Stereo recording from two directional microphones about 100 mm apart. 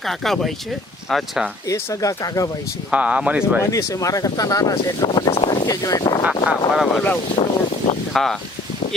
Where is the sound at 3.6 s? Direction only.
30° left (ahead or behind).